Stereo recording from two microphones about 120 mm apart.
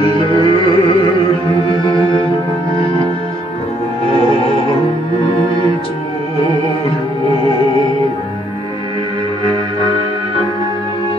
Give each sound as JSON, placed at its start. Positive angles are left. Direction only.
{"t": 0.0, "sound": "music", "side_deg": 45}